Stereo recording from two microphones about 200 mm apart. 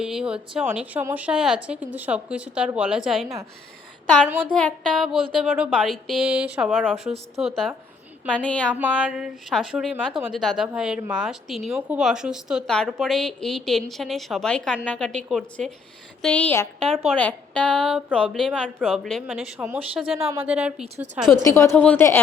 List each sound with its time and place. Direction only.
0.0 s a woman's voice: 5° right (ahead or behind)
4.5 s speech: 5° left (ahead or behind)
8.7 s speech: 5° right (ahead or behind)
20.8 s a woman's voice: 30° right (ahead or behind)
21.4 s a woman's voice: 10° left (ahead or behind)